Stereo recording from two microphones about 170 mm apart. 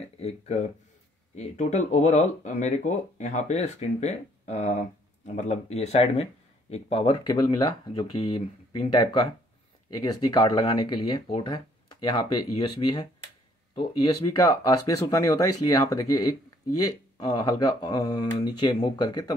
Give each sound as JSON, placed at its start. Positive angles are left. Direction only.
{"t": 0.2, "sound": "speech", "side_deg": 40}
{"t": 10.2, "sound": "speech", "side_deg": 25}